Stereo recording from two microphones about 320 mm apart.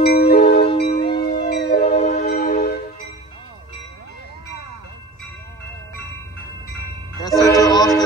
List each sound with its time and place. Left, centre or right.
0.0 s music: left
1.9 s music: left
7.2 s train: centre